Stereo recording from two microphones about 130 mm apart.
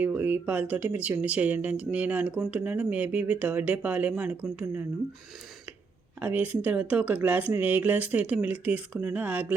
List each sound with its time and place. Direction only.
0.0 s speech: 10° right (ahead or behind)
4.4 s speech: 20° right (ahead or behind)
6.2 s speech: 15° right (ahead or behind)